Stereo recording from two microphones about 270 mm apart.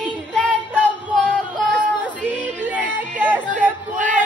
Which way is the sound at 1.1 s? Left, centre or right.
Centre.